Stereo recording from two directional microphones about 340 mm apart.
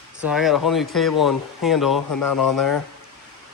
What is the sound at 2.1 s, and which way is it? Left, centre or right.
Speech, left.